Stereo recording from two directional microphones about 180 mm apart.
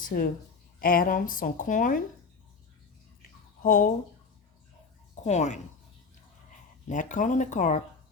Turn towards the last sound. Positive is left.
turn(degrees=45)  # may be behind; listen again after turning